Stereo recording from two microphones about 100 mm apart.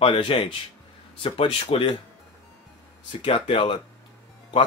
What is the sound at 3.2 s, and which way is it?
Speech, 65° left (ahead or behind).